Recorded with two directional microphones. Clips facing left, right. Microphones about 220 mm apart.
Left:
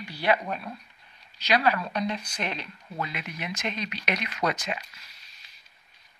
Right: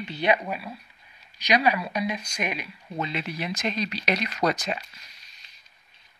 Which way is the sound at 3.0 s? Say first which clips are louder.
Right 4 dB; 30° right (ahead or behind).